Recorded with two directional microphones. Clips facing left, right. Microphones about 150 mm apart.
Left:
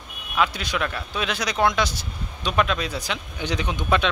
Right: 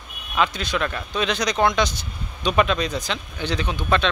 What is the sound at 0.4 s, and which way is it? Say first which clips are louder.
Speech: right 1 dB; 10° left (ahead or behind).